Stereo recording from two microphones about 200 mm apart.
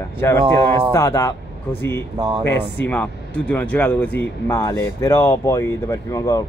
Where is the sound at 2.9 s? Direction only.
10° left (ahead or behind).